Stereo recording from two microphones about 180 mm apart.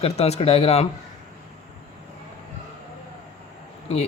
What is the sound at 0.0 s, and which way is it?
Speech, 35° left (ahead or behind).